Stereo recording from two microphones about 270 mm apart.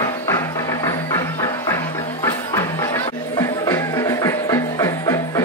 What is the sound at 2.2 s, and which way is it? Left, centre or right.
Music, centre.